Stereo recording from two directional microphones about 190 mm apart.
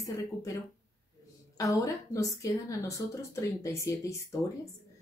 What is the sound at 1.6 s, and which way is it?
Speech, 15° left (ahead or behind).